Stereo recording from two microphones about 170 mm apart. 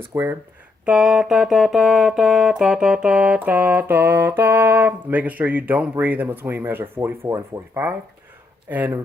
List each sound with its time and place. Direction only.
0.1 s speech: 20° right (ahead or behind)
0.9 s music: 5° right (ahead or behind)